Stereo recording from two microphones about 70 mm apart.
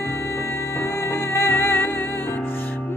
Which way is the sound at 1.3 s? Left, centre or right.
Left.